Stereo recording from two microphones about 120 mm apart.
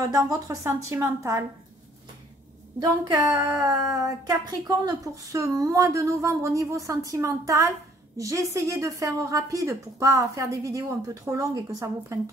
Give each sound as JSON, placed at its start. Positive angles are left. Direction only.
{"t": 0.1, "sound": "a woman's voice", "side_deg": -30}
{"t": 2.8, "sound": "a woman's voice", "side_deg": -30}